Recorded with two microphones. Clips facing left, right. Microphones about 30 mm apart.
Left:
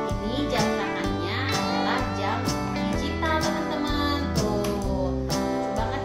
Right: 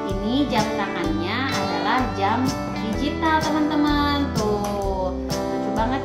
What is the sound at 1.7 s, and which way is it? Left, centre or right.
Speech, centre.